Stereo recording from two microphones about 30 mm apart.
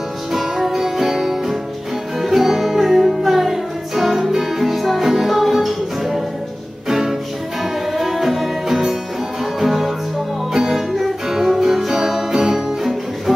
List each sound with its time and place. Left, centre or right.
0.3 s music: centre
6.9 s music: centre
10.9 s music: centre